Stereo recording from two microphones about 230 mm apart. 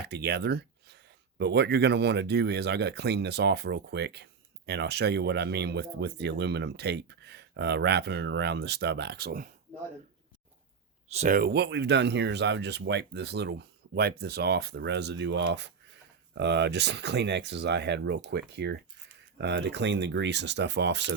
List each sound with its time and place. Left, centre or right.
0.0 s speech: right
11.1 s speech: right